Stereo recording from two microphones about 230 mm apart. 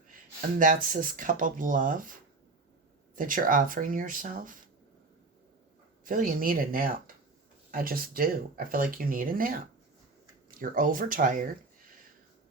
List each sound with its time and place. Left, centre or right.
0.6 s speech: right
3.2 s speech: right
6.1 s speech: right